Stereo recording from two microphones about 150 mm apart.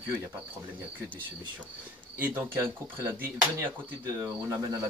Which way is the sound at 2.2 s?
15° right (ahead or behind).